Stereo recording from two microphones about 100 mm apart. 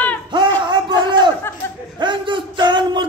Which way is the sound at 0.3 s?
50° right (ahead or behind).